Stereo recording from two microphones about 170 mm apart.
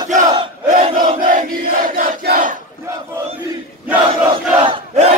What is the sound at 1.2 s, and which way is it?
Crowd, 50° right (ahead or behind).